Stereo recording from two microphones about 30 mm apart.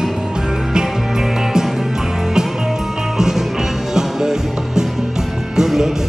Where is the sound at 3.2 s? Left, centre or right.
Centre.